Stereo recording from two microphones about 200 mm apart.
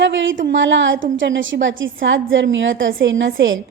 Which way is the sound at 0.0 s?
70° right (ahead or behind).